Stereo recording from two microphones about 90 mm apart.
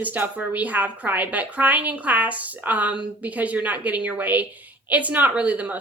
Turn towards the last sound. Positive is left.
turn(degrees=-15)  # may be behind; listen again after turning